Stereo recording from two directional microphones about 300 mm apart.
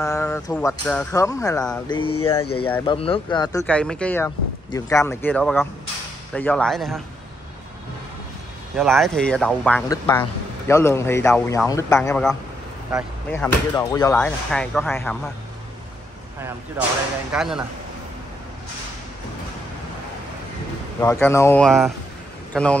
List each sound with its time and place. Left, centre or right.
0.0 s speech: centre
8.7 s speech: centre
16.3 s speech: centre
21.0 s speech: centre